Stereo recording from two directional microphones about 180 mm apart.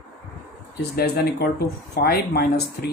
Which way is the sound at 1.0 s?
60° left (ahead or behind).